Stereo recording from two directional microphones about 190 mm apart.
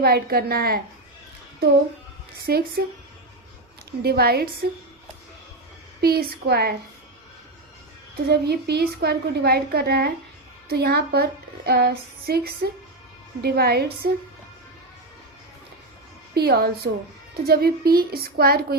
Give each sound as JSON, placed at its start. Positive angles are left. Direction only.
{"t": 0.0, "sound": "a woman's voice", "side_deg": -55}
{"t": 2.5, "sound": "a woman's voice", "side_deg": -55}
{"t": 4.0, "sound": "a woman's voice", "side_deg": -55}
{"t": 6.0, "sound": "a woman's voice", "side_deg": -55}
{"t": 8.1, "sound": "a woman's voice", "side_deg": -60}
{"t": 16.3, "sound": "a woman's voice", "side_deg": -55}